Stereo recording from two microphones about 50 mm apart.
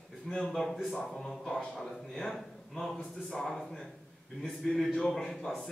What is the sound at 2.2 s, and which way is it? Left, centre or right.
A man's voice, centre.